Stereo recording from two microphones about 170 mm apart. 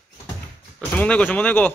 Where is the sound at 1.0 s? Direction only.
5° left (ahead or behind).